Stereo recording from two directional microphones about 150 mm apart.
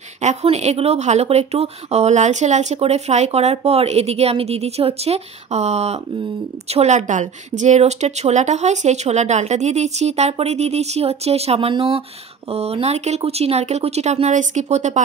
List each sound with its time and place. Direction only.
0.2 s speech: 50° right (ahead or behind)